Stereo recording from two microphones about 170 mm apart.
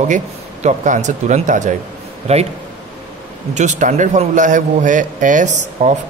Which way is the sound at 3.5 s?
45° right (ahead or behind).